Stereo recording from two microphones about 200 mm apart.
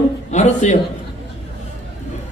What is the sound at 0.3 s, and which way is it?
Speech, 35° left (ahead or behind).